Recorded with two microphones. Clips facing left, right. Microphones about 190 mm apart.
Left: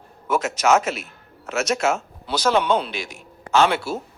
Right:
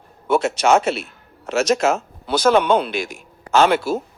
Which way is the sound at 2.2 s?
55° right (ahead or behind).